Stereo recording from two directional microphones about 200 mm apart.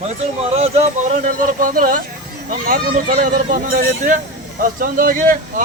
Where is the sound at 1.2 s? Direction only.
45° right (ahead or behind).